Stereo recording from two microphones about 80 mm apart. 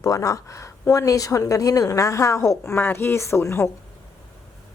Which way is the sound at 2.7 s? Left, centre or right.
Left.